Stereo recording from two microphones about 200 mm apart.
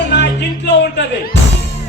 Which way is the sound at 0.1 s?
60° left (ahead or behind).